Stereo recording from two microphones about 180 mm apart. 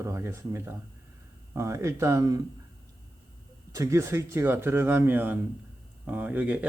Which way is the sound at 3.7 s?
15° right (ahead or behind).